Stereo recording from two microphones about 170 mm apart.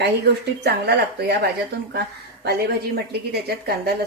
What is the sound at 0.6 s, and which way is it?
Speech, 75° right (ahead or behind).